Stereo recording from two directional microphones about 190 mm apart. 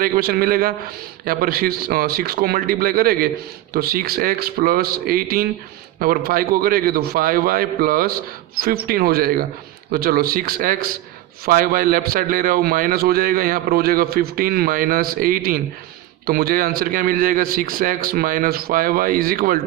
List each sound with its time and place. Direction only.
0.0 s a man's voice: 50° right (ahead or behind)